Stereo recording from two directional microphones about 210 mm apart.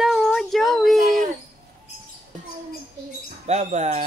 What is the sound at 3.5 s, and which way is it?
Speech, 30° right (ahead or behind).